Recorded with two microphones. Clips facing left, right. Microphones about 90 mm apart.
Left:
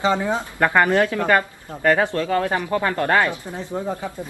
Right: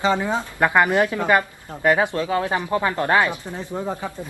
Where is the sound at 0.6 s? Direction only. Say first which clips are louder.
Even; 10° right (ahead or behind).